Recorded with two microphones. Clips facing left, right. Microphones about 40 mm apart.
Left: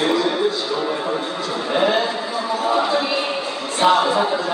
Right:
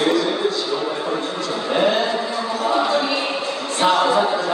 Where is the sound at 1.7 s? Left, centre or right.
Centre.